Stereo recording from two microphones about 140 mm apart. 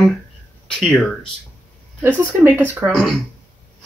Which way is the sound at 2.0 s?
15° right (ahead or behind).